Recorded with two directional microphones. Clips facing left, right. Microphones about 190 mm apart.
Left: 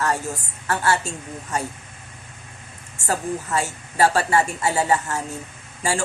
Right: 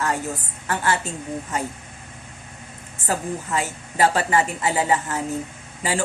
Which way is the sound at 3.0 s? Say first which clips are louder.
Left 1 dB; 15° right (ahead or behind).